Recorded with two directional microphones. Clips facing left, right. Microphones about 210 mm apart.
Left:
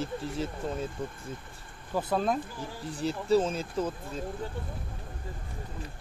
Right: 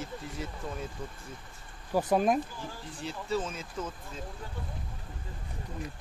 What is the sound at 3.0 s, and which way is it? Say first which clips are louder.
Speech: left 8 dB; 35° left (ahead or behind).